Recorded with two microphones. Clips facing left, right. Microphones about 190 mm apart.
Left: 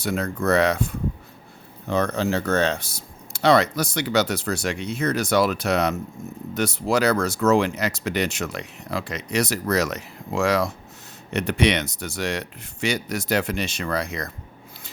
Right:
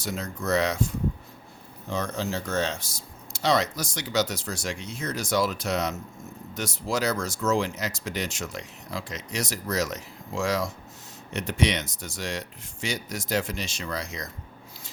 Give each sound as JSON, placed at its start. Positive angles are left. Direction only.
{"t": 0.0, "sound": "speech", "side_deg": 60}